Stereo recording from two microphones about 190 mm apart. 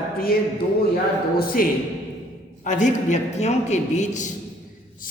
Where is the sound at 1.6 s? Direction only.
50° left (ahead or behind).